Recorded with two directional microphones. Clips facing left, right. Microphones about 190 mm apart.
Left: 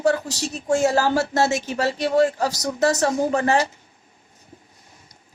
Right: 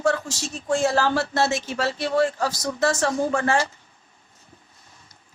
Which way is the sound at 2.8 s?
40° left (ahead or behind).